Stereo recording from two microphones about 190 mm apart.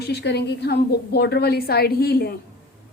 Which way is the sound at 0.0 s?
60° left (ahead or behind).